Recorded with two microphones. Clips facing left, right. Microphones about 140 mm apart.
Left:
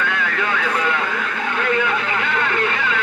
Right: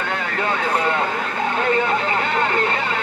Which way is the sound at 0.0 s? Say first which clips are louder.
Left 1 dB; 35° right (ahead or behind).